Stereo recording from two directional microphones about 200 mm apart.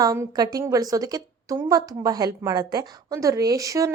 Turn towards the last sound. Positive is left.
turn(degrees=-15)  # may be behind; listen again after turning